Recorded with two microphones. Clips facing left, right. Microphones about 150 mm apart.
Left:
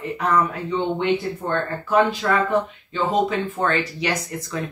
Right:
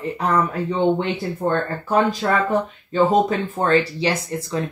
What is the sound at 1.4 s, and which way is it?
Speech, 40° right (ahead or behind).